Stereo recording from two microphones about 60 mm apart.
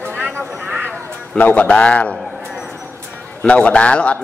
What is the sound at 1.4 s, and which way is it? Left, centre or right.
Speech, left.